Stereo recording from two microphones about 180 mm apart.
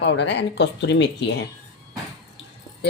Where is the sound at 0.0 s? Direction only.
75° left (ahead or behind).